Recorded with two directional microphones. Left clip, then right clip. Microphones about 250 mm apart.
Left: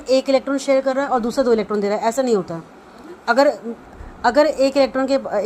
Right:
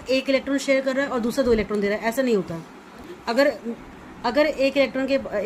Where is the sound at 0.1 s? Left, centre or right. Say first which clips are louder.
Left 5 dB; centre.